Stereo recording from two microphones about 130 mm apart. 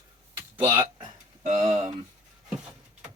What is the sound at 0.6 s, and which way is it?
Speech, 15° right (ahead or behind).